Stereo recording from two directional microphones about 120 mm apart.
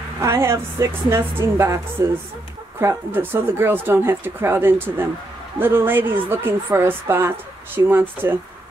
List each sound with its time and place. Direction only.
0.2 s a woman's voice: 20° right (ahead or behind)